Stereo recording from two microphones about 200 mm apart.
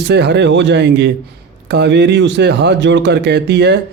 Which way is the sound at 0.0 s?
55° right (ahead or behind).